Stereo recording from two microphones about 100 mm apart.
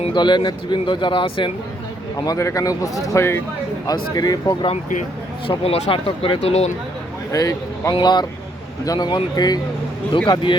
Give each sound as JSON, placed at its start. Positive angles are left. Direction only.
{"t": 0.1, "sound": "speech", "side_deg": 50}
{"t": 2.2, "sound": "speech", "side_deg": 35}
{"t": 3.8, "sound": "speech", "side_deg": 40}
{"t": 5.5, "sound": "speech", "side_deg": 85}
{"t": 7.3, "sound": "speech", "side_deg": 40}